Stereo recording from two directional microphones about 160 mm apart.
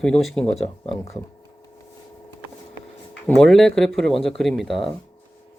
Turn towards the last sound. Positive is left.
turn(degrees=0)  # may be behind; listen again after turning